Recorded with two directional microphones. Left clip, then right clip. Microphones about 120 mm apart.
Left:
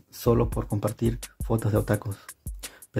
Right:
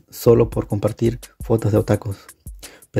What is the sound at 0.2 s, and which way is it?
Speech, 30° right (ahead or behind).